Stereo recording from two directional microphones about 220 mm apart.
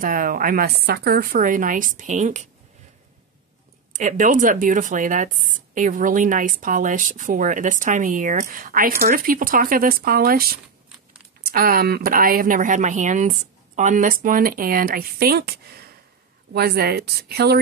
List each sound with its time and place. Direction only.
0.0 s speech: 40° right (ahead or behind)
3.9 s a woman's voice: 35° right (ahead or behind)